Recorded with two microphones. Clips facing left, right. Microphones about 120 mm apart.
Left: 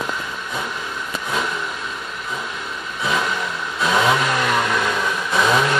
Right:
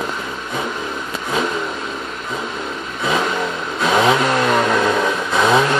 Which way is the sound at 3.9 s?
35° right (ahead or behind).